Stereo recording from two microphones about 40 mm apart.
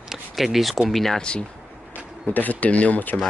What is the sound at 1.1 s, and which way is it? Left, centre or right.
Speech, left.